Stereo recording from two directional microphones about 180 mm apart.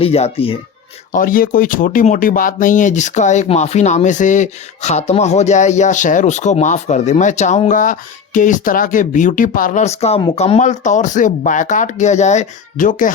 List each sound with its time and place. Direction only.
0.0 s speech: 35° left (ahead or behind)
1.1 s speech: 50° left (ahead or behind)